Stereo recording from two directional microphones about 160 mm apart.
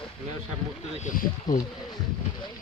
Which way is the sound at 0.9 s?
50° left (ahead or behind).